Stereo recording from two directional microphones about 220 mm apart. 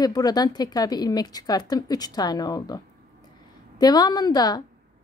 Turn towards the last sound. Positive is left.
turn(degrees=20)  # may be behind; listen again after turning